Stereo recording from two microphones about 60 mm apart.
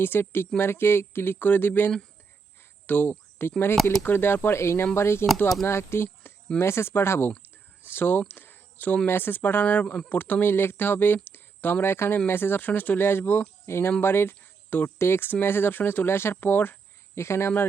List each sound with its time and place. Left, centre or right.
0.0 s speech: left
2.8 s a sound: left
4.0 s speech: left
8.3 s a sound: left
9.0 s speech: left
9.8 s speech: centre
10.1 s speech: left
13.7 s speech: left
17.2 s speech: left